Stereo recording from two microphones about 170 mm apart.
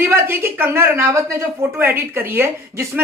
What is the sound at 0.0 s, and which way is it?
A woman's voice, 15° right (ahead or behind).